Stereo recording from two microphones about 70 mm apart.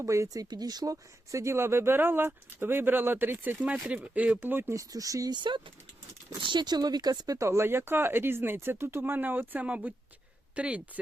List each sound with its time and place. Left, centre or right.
0.0 s speech: right
0.5 s speech: right
1.3 s speech: right
3.6 s speech: centre
4.4 s speech: right
4.7 s speech: right
5.3 s speech: right
7.3 s speech: right; by 10.8 s centre